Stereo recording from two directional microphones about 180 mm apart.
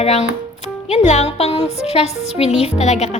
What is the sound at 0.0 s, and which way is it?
Speech, 35° left (ahead or behind).